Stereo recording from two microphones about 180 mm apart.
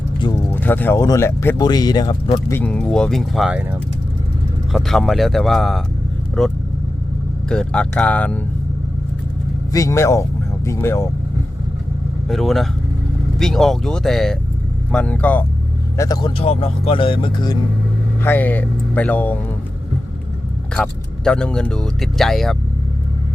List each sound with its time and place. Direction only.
0.5 s speech: 10° left (ahead or behind)
2.5 s speech: 10° left (ahead or behind)
4.7 s speech: centre (ahead or behind)
9.7 s speech: 15° left (ahead or behind)
12.3 s speech: centre (ahead or behind)
16.0 s speech: 20° left (ahead or behind)
16.4 s speech: 35° left (ahead or behind)
18.2 s speech: 10° left (ahead or behind)
20.7 s speech: 5° left (ahead or behind)